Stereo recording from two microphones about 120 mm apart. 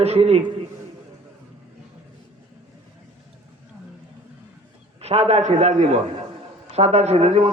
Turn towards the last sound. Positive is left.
turn(degrees=-65)  # may be behind; listen again after turning